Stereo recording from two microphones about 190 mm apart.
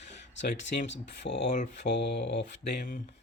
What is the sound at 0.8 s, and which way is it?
Speech, 65° left (ahead or behind).